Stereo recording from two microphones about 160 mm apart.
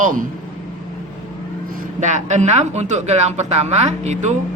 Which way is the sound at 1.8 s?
50° right (ahead or behind).